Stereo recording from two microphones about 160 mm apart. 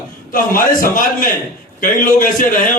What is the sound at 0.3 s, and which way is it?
A man's voice, 60° left (ahead or behind).